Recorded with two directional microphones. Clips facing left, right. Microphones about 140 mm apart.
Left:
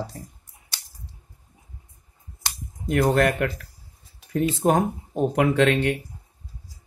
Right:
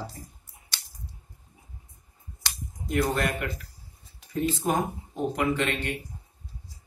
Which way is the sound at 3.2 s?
65° left (ahead or behind).